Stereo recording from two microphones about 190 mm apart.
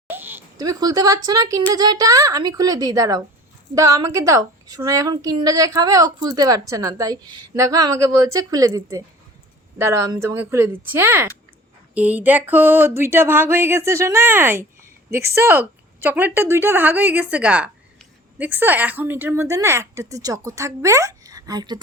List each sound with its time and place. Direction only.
0.1 s a woman's voice: 10° right (ahead or behind)